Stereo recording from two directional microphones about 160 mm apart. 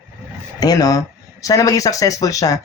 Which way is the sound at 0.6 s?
25° left (ahead or behind).